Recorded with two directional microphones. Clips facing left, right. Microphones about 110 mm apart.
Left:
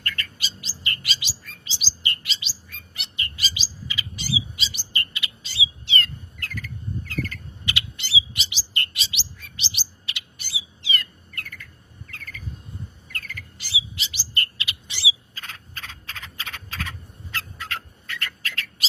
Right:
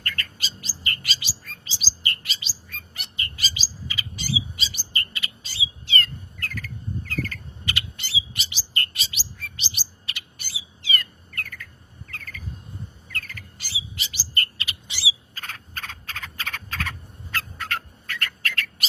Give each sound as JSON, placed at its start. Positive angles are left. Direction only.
{"t": 0.0, "sound": "bird", "side_deg": -40}
{"t": 15.4, "sound": "frog", "side_deg": -45}
{"t": 17.3, "sound": "bird", "side_deg": -50}